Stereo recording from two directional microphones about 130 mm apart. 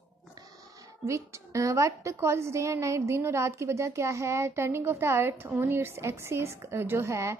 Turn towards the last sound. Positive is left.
turn(degrees=-20)  # may be behind; listen again after turning